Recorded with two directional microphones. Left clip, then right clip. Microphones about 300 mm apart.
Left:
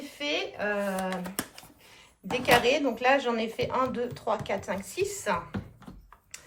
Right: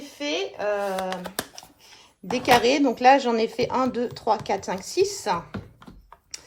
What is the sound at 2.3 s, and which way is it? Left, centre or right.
Speech, centre.